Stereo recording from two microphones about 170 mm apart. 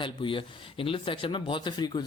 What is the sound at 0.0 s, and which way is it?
Speech, 30° left (ahead or behind).